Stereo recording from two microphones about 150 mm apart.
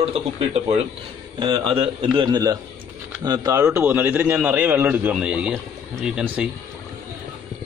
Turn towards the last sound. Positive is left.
turn(degrees=-5)  # may be behind; listen again after turning